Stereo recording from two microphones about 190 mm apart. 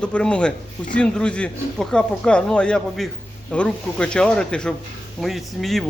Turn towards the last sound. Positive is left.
turn(degrees=0)  # may be behind; listen again after turning